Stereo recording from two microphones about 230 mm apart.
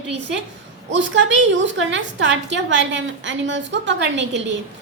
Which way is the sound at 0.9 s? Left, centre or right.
Right.